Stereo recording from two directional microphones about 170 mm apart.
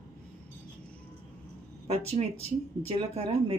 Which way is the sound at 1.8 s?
35° right (ahead or behind).